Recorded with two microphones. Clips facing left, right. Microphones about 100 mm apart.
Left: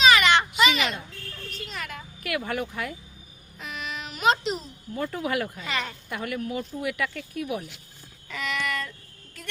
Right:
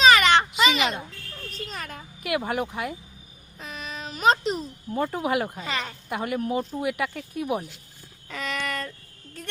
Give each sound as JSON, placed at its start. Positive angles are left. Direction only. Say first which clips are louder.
{"t": 0.0, "sound": "a sound", "louder": "right 2 dB", "side_deg": -40}
{"t": 0.6, "sound": "speech", "louder": "right 1 dB", "side_deg": -35}
{"t": 1.5, "sound": "vehicle", "louder": "right 1 dB", "side_deg": -35}
{"t": 2.2, "sound": "speech", "louder": "right 3 dB", "side_deg": -20}
{"t": 3.6, "sound": "baby cry", "louder": "left 1 dB", "side_deg": -35}
{"t": 4.9, "sound": "speech", "louder": "right 3 dB", "side_deg": -25}
{"t": 5.5, "sound": "speech", "louder": "even", "side_deg": -35}
{"t": 8.3, "sound": "child singing", "louder": "even", "side_deg": -40}